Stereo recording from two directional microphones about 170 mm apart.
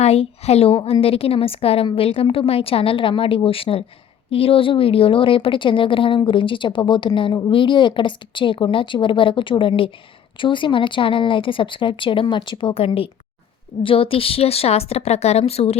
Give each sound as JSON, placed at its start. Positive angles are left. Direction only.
{"t": 0.0, "sound": "a woman's voice", "side_deg": 40}